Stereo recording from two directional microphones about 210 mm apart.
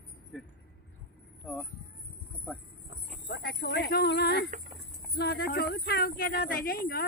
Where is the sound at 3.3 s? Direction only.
55° left (ahead or behind).